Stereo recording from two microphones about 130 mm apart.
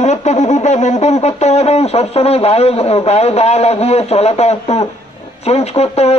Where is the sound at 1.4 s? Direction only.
55° left (ahead or behind).